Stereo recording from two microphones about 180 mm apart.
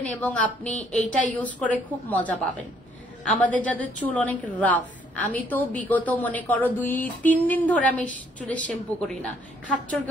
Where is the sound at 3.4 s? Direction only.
10° left (ahead or behind).